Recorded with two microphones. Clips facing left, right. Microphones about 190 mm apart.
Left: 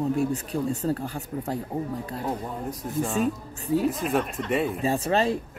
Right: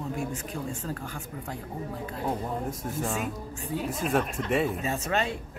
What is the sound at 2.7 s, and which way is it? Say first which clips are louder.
Speech: left 3 dB; centre (ahead or behind).